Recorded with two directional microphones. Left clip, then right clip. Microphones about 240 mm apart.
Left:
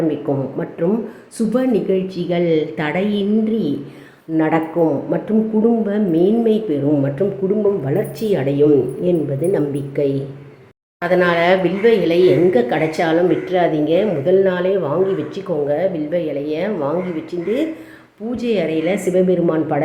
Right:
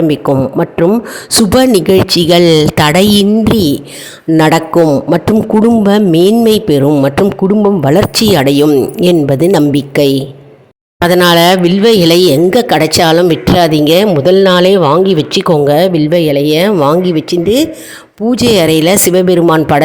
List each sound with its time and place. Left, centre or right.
0.8 s speech: right